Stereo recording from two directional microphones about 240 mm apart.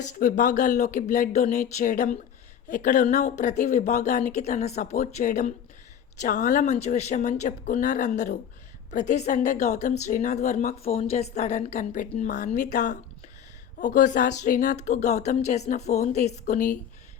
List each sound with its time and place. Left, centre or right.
0.1 s a woman's voice: left